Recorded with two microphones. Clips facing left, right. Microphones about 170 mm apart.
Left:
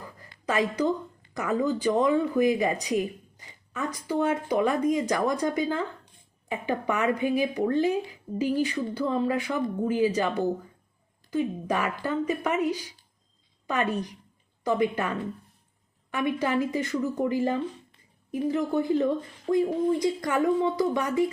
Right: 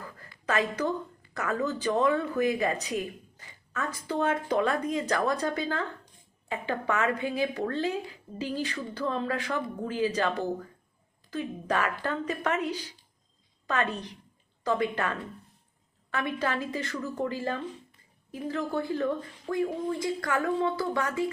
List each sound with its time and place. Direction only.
0.0 s speech: 15° left (ahead or behind)